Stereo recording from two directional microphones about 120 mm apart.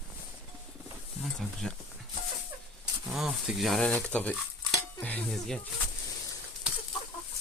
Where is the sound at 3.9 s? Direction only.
15° left (ahead or behind).